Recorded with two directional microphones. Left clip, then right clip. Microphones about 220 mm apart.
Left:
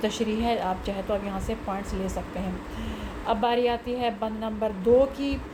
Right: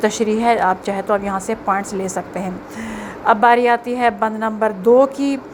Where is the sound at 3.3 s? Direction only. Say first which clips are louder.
Right 12 dB; 20° right (ahead or behind).